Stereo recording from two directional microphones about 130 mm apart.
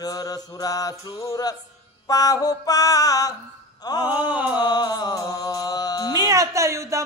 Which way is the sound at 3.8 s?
30° left (ahead or behind).